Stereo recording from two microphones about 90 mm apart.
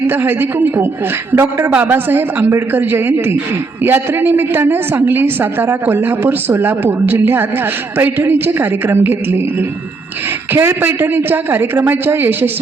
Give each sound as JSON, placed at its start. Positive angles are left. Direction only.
{"t": 0.1, "sound": "a woman's voice", "side_deg": -25}